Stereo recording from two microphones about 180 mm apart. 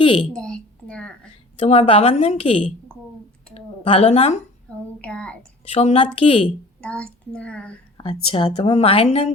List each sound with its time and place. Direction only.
0.0 s a woman's voice: 30° left (ahead or behind)
0.3 s a woman's voice: 5° left (ahead or behind)
1.5 s a woman's voice: 35° left (ahead or behind)
4.9 s a child's voice: 5° left (ahead or behind)
5.6 s a woman's voice: 35° left (ahead or behind)
6.8 s a child's voice: 5° left (ahead or behind)
7.9 s a woman's voice: 30° left (ahead or behind)